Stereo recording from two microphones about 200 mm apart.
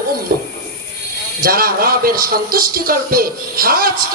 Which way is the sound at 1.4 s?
45° right (ahead or behind).